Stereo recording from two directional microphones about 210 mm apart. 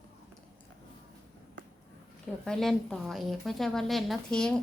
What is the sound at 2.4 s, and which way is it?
A woman's voice, centre (ahead or behind).